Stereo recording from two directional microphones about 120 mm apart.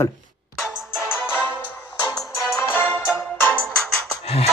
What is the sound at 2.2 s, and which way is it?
Music, 25° left (ahead or behind).